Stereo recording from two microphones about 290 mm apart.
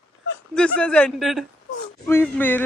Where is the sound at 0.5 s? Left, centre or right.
Centre.